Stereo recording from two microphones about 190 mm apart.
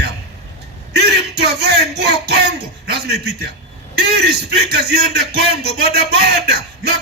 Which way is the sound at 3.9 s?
60° right (ahead or behind).